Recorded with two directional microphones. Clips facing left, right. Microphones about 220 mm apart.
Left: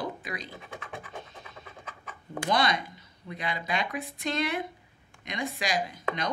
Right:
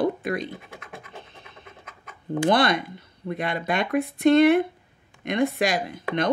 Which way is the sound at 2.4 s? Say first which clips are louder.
Right 6 dB; 55° right (ahead or behind).